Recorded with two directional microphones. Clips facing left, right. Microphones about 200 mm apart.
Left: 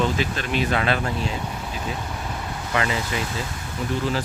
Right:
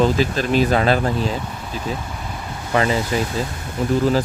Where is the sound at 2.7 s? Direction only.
35° right (ahead or behind).